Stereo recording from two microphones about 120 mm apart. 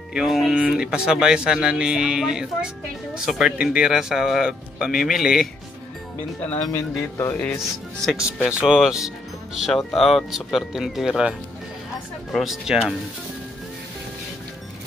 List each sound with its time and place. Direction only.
0.1 s speech: centre (ahead or behind)
6.4 s speech: 15° left (ahead or behind)
8.5 s speech: 5° right (ahead or behind)